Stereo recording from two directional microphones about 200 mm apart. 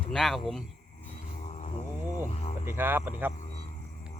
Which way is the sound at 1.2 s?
35° left (ahead or behind).